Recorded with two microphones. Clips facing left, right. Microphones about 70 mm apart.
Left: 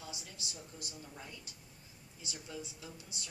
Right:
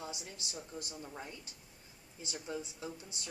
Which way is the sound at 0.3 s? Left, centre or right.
Right.